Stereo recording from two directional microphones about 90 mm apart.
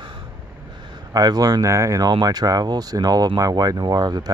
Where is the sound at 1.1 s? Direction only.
45° right (ahead or behind).